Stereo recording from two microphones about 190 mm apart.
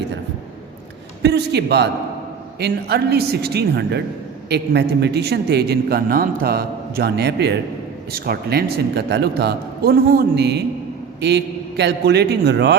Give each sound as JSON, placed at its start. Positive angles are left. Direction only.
{"t": 1.2, "sound": "a man's voice", "side_deg": -60}